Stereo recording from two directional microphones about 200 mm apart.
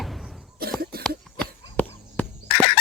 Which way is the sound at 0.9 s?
50° right (ahead or behind).